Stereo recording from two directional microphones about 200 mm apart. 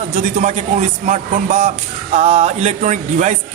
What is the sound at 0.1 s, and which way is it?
A man's voice, 35° right (ahead or behind).